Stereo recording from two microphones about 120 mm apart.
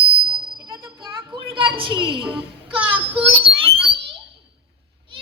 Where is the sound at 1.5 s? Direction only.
45° right (ahead or behind).